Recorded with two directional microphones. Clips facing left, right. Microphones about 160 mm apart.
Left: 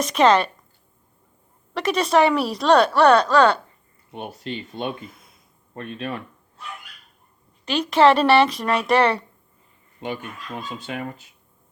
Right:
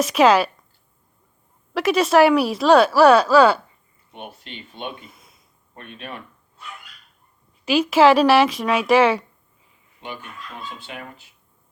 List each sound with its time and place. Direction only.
0.0 s speech: 5° right (ahead or behind)
1.7 s speech: 5° right (ahead or behind)
4.5 s speech: 40° left (ahead or behind)
5.0 s a sound: centre (ahead or behind)
5.7 s speech: 35° left (ahead or behind)
7.6 s speech: 5° right (ahead or behind)